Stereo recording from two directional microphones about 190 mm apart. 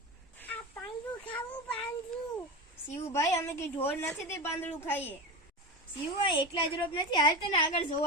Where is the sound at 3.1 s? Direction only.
15° left (ahead or behind).